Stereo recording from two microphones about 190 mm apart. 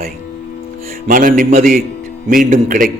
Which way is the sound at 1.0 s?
45° right (ahead or behind).